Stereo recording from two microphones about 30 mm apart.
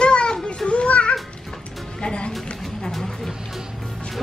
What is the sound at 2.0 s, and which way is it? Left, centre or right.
Music, left.